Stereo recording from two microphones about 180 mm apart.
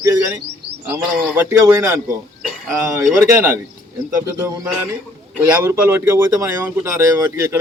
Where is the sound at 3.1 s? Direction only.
15° right (ahead or behind).